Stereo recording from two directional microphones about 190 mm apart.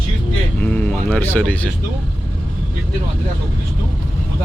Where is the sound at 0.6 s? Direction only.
10° left (ahead or behind).